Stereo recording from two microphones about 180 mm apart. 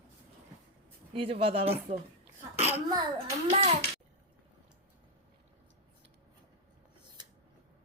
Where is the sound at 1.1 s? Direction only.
30° right (ahead or behind).